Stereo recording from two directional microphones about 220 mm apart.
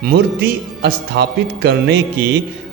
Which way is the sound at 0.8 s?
50° right (ahead or behind).